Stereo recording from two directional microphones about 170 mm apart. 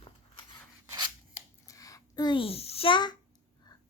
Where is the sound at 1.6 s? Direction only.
20° left (ahead or behind).